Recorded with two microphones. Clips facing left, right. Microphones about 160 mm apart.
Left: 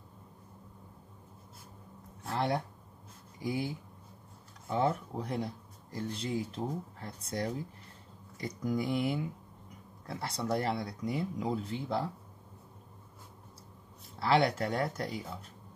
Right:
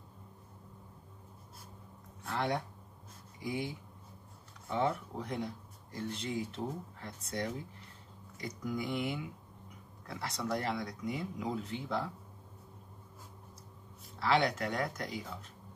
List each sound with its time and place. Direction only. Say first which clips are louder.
2.2 s speech: left 2 dB; 35° left (ahead or behind)
14.2 s speech: left 3 dB; 35° left (ahead or behind)